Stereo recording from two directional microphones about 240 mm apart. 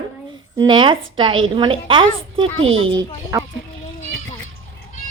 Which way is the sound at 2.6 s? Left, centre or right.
Right.